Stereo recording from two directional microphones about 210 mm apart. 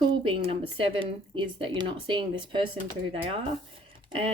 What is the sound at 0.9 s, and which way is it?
Speech, 25° right (ahead or behind).